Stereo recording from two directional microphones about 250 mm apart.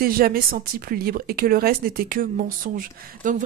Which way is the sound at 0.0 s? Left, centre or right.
Right.